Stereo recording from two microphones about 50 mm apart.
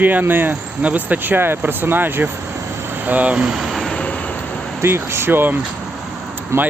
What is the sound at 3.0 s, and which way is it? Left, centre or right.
Speech, right.